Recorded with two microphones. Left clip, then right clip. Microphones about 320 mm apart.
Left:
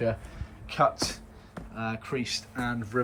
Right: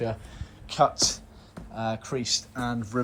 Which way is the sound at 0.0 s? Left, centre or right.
Centre.